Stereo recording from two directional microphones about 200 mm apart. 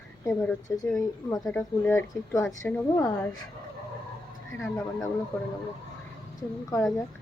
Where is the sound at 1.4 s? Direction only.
Centre (ahead or behind).